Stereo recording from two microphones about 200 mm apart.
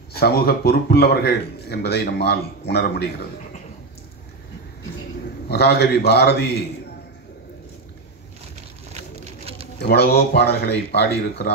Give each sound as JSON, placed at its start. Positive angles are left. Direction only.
{"t": 0.1, "sound": "a man's voice", "side_deg": 50}
{"t": 5.5, "sound": "speech", "side_deg": 55}
{"t": 8.9, "sound": "a sound", "side_deg": -30}
{"t": 9.8, "sound": "speech", "side_deg": 50}